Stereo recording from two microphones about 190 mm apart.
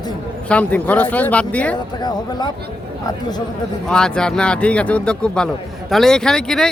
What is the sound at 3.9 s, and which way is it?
A man's voice, 5° left (ahead or behind).